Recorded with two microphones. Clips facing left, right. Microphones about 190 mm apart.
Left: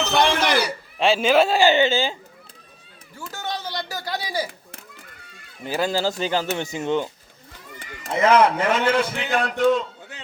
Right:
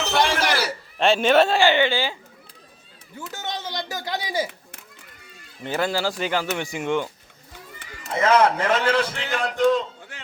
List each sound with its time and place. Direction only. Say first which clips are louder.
0.0 s a sound: left 2 dB; 10° right (ahead or behind)
0.9 s a man's voice: even; centre (ahead or behind)
1.6 s speech: left 2 dB; 20° left (ahead or behind)
3.2 s a man's voice: left 1 dB; 20° right (ahead or behind)
5.6 s speech: left 1 dB; 15° left (ahead or behind)
8.2 s a man's voice: left 1 dB; 15° left (ahead or behind)